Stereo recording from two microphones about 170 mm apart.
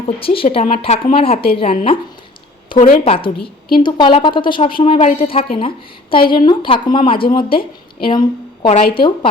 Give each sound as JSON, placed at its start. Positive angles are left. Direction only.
{"t": 0.2, "sound": "a woman's voice", "side_deg": 35}
{"t": 2.7, "sound": "a woman's voice", "side_deg": 55}
{"t": 3.0, "sound": "a woman's voice", "side_deg": 30}